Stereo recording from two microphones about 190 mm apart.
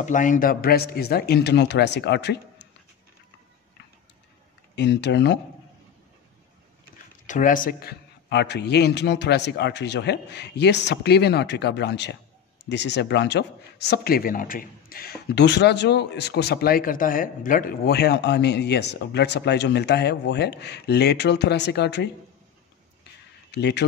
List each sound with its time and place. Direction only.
0.0 s speech: 40° left (ahead or behind); by 2.3 s 65° left (ahead or behind)
4.7 s speech: 65° left (ahead or behind)
7.2 s speech: 45° left (ahead or behind); by 22.1 s 65° left (ahead or behind)
23.5 s a man's voice: 65° left (ahead or behind)